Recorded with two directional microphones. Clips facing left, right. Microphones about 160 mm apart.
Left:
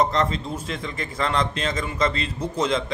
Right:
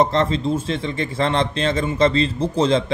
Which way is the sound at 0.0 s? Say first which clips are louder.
Right 4 dB; 25° right (ahead or behind).